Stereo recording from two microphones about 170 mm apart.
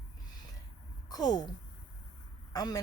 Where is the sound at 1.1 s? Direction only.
25° left (ahead or behind).